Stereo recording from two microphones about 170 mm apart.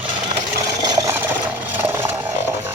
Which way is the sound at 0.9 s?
20° right (ahead or behind).